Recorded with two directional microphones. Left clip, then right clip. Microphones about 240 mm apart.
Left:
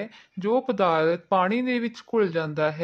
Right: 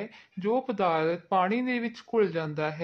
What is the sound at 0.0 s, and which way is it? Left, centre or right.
Speech, left.